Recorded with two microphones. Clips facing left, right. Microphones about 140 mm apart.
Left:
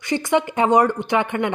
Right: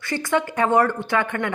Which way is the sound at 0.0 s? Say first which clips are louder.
Left 3 dB; 20° left (ahead or behind).